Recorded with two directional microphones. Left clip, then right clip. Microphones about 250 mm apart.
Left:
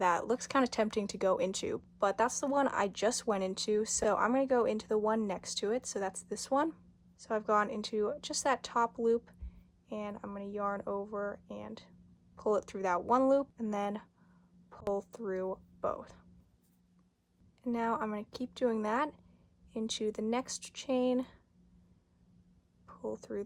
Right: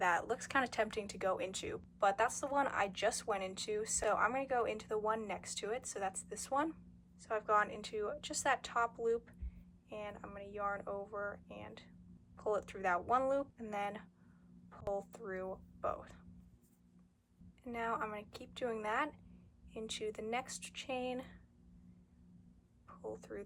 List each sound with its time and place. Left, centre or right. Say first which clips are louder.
0.0 s speech: left 4 dB; centre
17.7 s speech: left 5 dB; centre
23.0 s speech: left 7 dB; left